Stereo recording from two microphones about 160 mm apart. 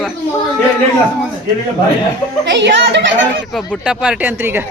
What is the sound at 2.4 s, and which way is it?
A child's voice, 90° right.